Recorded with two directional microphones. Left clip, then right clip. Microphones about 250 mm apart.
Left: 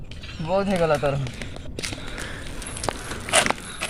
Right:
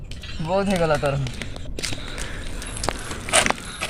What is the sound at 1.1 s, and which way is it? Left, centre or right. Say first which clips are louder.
Squish: right 1 dB; right.